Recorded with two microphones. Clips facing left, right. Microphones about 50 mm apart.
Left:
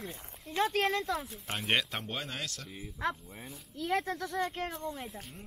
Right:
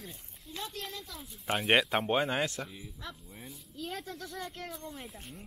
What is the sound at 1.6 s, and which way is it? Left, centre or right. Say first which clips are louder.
Speech: right 5 dB; centre.